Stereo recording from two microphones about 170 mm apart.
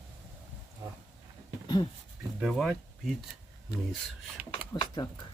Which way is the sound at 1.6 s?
25° left (ahead or behind).